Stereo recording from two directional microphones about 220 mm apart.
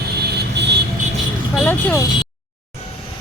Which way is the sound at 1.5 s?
10° left (ahead or behind).